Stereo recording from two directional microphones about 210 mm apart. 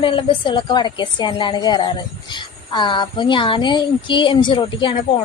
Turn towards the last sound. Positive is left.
turn(degrees=25)  # may be behind; listen again after turning